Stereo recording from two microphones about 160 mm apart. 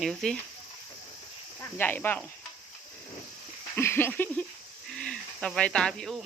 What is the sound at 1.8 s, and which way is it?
Speech, 10° left (ahead or behind).